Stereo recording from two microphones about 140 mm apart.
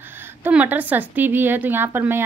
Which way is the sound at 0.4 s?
10° right (ahead or behind).